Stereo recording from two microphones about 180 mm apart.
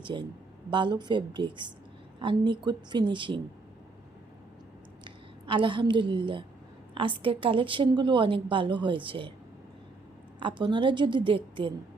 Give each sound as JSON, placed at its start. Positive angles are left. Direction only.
{"t": 0.0, "sound": "a woman's voice", "side_deg": -25}
{"t": 5.0, "sound": "a woman's voice", "side_deg": -25}
{"t": 10.4, "sound": "a woman's voice", "side_deg": -25}